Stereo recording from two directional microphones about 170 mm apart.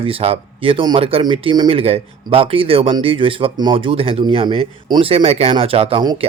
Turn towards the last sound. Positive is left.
turn(degrees=-30)  # may be behind; listen again after turning